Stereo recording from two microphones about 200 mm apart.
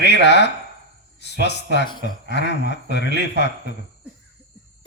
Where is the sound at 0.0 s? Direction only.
60° left (ahead or behind).